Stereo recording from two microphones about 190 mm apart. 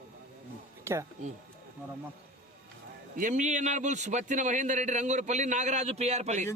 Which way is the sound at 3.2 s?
40° right (ahead or behind).